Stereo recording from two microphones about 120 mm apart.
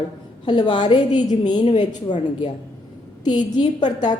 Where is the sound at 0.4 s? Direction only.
40° left (ahead or behind).